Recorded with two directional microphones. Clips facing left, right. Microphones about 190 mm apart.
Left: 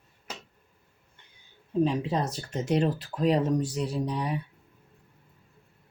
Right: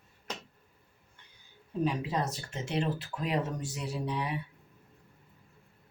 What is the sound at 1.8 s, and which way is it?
Speech, 30° left (ahead or behind).